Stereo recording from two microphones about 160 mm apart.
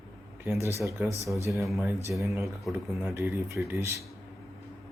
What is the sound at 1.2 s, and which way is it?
Speech, 20° right (ahead or behind).